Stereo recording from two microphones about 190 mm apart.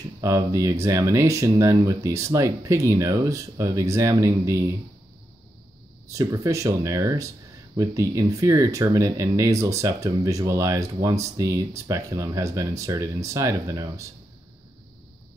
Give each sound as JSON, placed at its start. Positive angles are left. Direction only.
{"t": 0.2, "sound": "speech", "side_deg": -15}
{"t": 6.0, "sound": "speech", "side_deg": -15}